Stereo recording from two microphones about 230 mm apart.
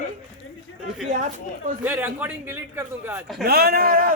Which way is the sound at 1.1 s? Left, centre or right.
Right.